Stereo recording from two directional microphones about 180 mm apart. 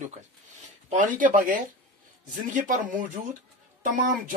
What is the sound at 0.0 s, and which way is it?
Speech, 40° right (ahead or behind).